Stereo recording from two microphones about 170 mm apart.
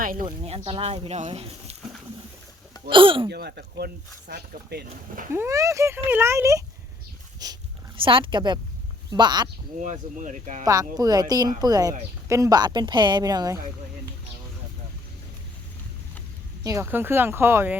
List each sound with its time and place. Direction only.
0.3 s speech: 35° right (ahead or behind)
2.9 s speech: 30° right (ahead or behind)
3.2 s speech: 75° right (ahead or behind)
5.3 s speech: 15° right (ahead or behind)
9.8 s speech: 45° right (ahead or behind)
10.7 s speech: 20° right (ahead or behind)
16.6 s speech: 15° right (ahead or behind)